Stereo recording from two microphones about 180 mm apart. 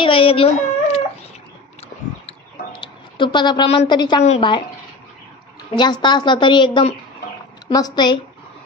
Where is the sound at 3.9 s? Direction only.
25° left (ahead or behind).